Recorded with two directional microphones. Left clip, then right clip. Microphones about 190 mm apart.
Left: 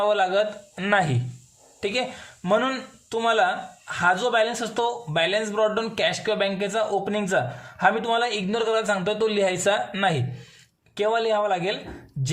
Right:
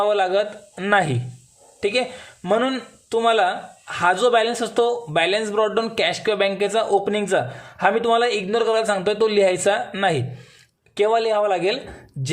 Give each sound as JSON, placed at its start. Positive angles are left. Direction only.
{"t": 0.0, "sound": "speech", "side_deg": -15}